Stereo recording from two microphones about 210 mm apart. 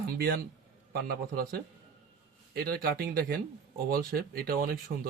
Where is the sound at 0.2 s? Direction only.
50° right (ahead or behind).